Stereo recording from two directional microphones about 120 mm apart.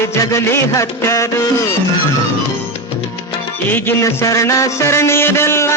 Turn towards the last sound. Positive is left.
turn(degrees=20)  # may be behind; listen again after turning